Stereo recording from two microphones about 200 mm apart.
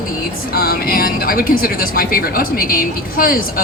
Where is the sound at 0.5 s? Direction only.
50° left (ahead or behind).